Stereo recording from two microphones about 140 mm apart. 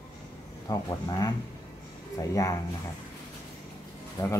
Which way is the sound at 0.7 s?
25° left (ahead or behind).